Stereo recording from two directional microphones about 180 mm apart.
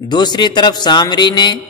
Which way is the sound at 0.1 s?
25° left (ahead or behind).